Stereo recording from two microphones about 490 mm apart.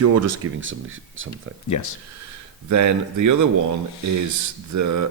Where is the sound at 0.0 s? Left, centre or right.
Right.